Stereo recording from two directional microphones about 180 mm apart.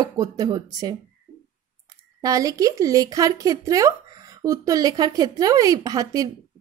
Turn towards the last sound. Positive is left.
turn(degrees=-20)  # may be behind; listen again after turning